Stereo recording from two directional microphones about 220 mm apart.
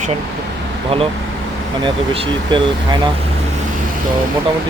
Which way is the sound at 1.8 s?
20° right (ahead or behind).